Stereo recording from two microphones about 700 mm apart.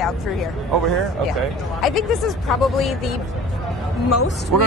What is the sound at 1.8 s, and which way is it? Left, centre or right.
Speech, centre.